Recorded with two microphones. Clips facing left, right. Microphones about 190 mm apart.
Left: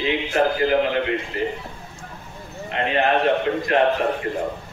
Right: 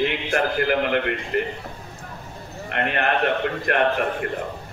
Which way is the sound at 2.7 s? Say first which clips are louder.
Left 3 dB; 60° right (ahead or behind).